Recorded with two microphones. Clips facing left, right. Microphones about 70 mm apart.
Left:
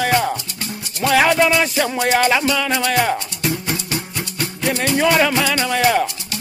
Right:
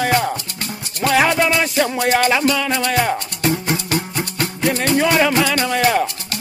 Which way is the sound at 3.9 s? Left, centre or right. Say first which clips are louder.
Right 4 dB; right.